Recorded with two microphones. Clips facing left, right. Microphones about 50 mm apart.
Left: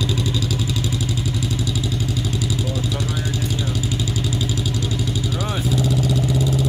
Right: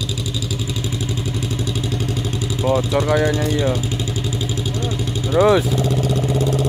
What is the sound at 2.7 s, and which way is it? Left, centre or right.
Vehicle, right.